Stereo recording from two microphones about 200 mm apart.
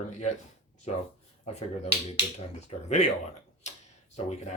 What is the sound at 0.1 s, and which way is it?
Speech, 35° left (ahead or behind).